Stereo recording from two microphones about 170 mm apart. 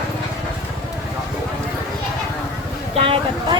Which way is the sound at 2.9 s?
35° right (ahead or behind).